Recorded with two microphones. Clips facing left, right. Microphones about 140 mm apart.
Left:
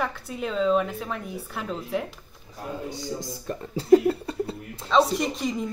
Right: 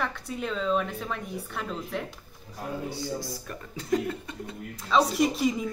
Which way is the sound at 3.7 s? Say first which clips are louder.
Left 10 dB; 35° left (ahead or behind).